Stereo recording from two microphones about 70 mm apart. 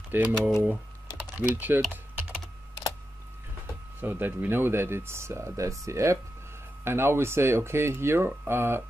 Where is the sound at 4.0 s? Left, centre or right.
Right.